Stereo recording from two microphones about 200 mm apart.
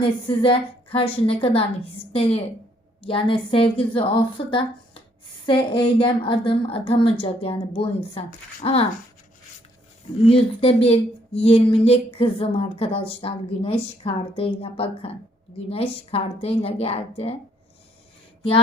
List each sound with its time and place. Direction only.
0.0 s speech: 25° left (ahead or behind)
10.2 s speech: 30° left (ahead or behind)